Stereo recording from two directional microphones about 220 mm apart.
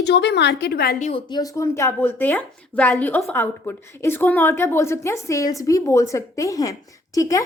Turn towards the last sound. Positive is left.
turn(degrees=15)  # may be behind; listen again after turning